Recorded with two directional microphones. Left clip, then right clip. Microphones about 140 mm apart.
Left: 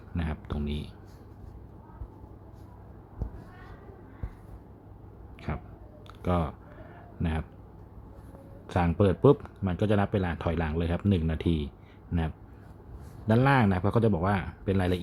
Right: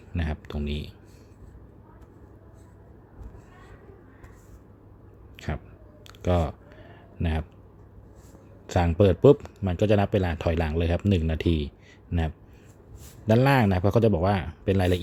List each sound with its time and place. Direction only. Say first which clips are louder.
0.1 s a sound: right 2 dB; 35° right (ahead or behind)
5.5 s a sound: right 2 dB; 40° right (ahead or behind)
6.2 s speech: right 4 dB; 40° right (ahead or behind)
8.6 s speech: right 4 dB; 35° right (ahead or behind)
12.1 s speech: right 3 dB; 25° right (ahead or behind)
13.2 s speech: right 3 dB; 40° right (ahead or behind)